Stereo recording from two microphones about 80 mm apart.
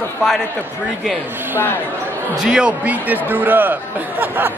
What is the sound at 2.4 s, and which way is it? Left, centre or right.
Speech, centre.